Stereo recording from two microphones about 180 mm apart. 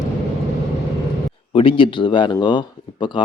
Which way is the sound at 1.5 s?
30° left (ahead or behind).